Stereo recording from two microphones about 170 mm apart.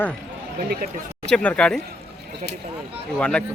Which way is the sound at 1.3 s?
5° left (ahead or behind).